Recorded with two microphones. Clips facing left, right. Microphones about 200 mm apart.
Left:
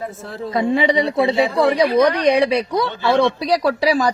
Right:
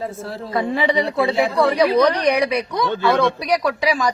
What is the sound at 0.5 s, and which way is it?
A man's voice, 20° left (ahead or behind).